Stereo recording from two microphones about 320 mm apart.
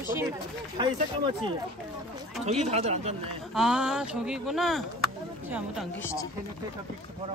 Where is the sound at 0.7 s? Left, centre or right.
Centre.